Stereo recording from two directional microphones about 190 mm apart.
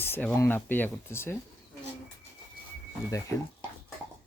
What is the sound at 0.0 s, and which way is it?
Speech, 10° left (ahead or behind).